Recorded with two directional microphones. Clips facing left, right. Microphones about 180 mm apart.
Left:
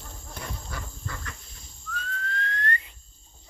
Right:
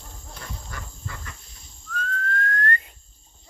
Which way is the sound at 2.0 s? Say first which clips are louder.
Right 6 dB; 50° right (ahead or behind).